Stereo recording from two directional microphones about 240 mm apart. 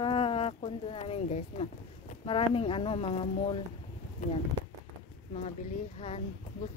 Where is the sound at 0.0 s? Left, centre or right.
Left.